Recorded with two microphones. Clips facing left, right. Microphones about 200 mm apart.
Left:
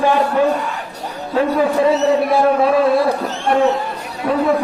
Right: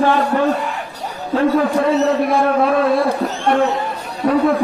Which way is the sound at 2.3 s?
Centre (ahead or behind).